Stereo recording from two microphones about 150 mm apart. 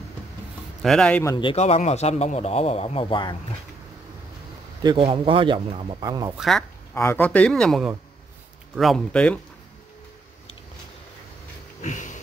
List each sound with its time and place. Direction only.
0.8 s speech: 5° left (ahead or behind)
1.2 s a man's voice: 30° left (ahead or behind)
4.8 s speech: 35° right (ahead or behind)
6.0 s speech: 25° right (ahead or behind)
6.3 s speech: centre (ahead or behind)
6.9 s speech: 15° left (ahead or behind)
11.8 s sniff: 55° left (ahead or behind)